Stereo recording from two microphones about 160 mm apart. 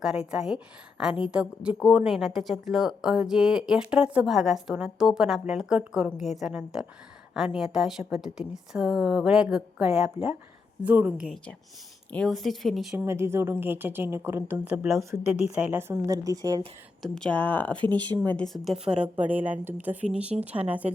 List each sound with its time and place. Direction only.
0.0 s a woman's voice: 5° right (ahead or behind)
13.0 s a woman's voice: 15° right (ahead or behind)
17.0 s speech: 5° left (ahead or behind)
18.0 s a woman's voice: 30° right (ahead or behind)
18.3 s a woman's voice: 5° left (ahead or behind)